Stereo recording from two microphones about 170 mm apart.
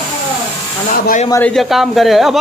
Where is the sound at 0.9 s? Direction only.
50° left (ahead or behind).